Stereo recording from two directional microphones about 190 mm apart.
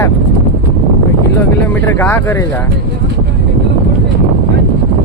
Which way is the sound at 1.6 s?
10° left (ahead or behind).